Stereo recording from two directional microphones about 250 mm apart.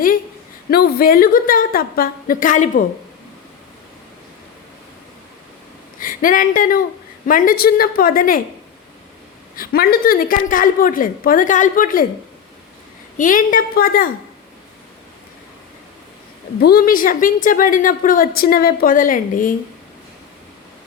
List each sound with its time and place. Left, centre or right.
0.7 s a woman's voice: left
6.0 s a woman's voice: left
9.6 s a woman's voice: left
13.1 s a woman's voice: left
16.6 s a woman's voice: left